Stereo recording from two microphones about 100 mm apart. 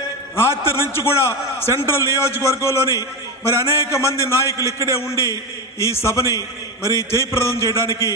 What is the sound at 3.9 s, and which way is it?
Speech, 25° left (ahead or behind).